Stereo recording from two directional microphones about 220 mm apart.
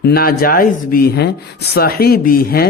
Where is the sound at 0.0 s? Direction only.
45° left (ahead or behind).